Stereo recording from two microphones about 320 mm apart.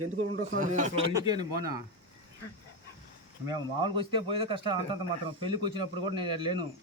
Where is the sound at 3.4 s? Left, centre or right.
Centre.